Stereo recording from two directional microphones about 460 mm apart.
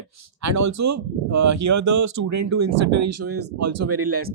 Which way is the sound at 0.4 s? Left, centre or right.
Right.